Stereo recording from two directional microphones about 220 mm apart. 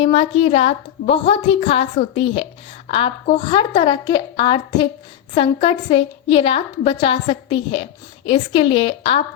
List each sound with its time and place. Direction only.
0.0 s a woman's voice: 25° left (ahead or behind)